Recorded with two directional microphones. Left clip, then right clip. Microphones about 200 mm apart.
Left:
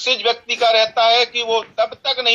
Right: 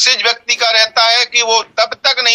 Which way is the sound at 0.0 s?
50° right (ahead or behind).